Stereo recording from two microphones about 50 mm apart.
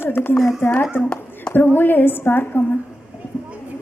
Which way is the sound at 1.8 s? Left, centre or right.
Left.